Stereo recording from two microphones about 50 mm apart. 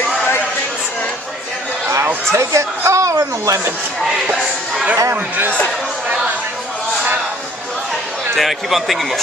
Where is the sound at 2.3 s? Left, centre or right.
Right.